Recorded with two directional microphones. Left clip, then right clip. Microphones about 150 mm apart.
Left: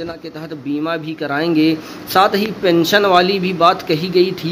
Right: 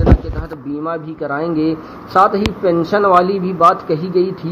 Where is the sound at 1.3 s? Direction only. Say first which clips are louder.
Left 3 dB; 25° left (ahead or behind).